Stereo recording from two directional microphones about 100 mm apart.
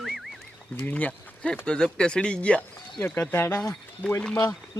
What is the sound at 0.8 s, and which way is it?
Speech, 15° left (ahead or behind).